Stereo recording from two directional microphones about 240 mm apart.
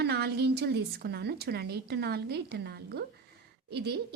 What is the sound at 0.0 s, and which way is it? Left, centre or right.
A woman's voice, right.